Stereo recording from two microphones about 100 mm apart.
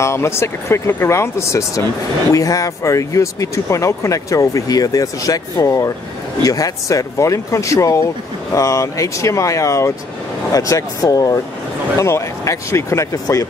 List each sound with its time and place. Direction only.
0.0 s speech: 30° left (ahead or behind)